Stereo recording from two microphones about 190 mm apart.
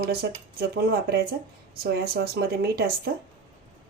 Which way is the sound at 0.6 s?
55° right (ahead or behind).